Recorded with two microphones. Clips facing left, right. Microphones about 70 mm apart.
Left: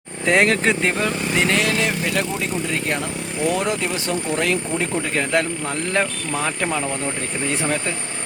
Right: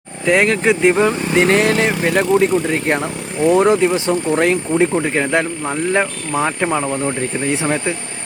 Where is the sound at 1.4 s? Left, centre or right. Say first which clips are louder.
Right 7 dB; right; by 7.9 s centre.